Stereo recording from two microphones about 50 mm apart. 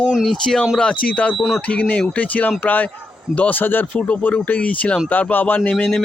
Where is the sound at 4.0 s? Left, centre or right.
Left.